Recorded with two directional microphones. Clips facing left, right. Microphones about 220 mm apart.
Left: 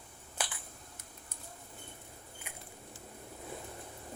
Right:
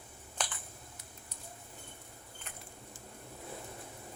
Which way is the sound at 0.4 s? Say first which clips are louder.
Even; 5° left (ahead or behind).